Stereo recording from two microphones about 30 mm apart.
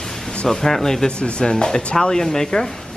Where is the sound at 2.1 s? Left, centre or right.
Left.